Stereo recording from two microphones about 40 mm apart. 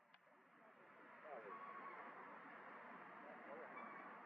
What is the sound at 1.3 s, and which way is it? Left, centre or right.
Vehicle, centre.